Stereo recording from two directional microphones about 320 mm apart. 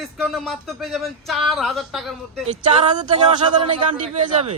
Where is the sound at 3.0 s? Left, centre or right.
Centre.